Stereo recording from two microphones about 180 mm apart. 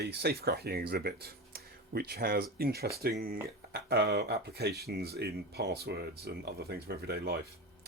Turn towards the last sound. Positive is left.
turn(degrees=-65)  # may be behind; listen again after turning